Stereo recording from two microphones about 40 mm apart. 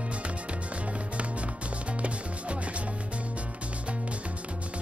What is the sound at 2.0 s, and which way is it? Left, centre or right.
Music, right.